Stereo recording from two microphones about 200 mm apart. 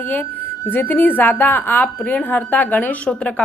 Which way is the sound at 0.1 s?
10° left (ahead or behind).